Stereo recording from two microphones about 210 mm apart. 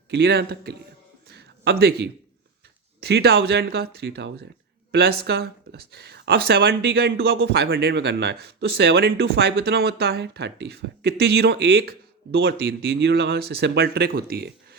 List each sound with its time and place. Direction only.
0.1 s speech: 55° right (ahead or behind)
1.3 s a sound: 50° right (ahead or behind)
3.0 s speech: 50° right (ahead or behind)